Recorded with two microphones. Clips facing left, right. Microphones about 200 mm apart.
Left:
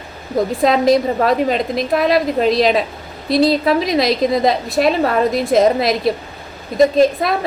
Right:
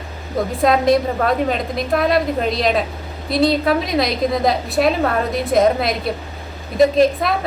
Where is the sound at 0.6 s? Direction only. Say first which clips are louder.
Left 1 dB; centre (ahead or behind).